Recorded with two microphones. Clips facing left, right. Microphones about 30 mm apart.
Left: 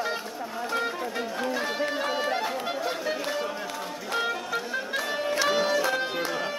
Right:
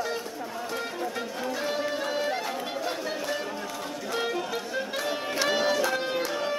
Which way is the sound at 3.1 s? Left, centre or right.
Centre.